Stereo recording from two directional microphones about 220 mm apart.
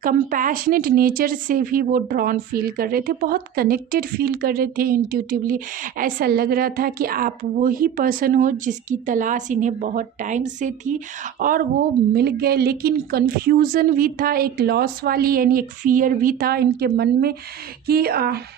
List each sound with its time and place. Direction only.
0.0 s speech: 40° right (ahead or behind)